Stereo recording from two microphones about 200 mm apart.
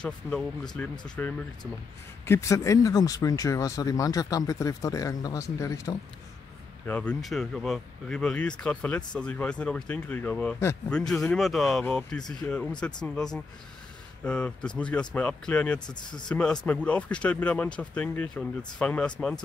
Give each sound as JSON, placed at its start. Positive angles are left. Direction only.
{"t": 0.0, "sound": "speech", "side_deg": 0}
{"t": 15.9, "sound": "speech", "side_deg": 20}
{"t": 16.3, "sound": "speech", "side_deg": 5}